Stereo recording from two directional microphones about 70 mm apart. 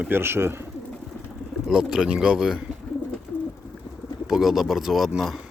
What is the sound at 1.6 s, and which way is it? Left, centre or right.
Speech, centre.